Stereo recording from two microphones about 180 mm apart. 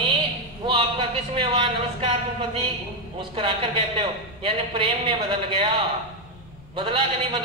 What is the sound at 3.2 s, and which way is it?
A man's voice, 30° right (ahead or behind).